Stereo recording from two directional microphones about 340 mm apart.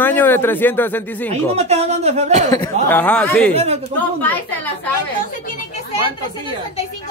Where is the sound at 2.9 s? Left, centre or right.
Centre.